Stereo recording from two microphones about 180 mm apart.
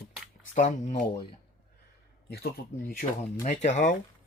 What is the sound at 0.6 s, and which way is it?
Speech, 40° left (ahead or behind).